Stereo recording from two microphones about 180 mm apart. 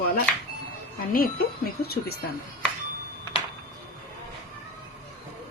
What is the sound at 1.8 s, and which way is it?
Speech, 60° left (ahead or behind).